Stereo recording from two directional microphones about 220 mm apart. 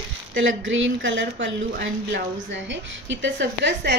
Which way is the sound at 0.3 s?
60° right (ahead or behind).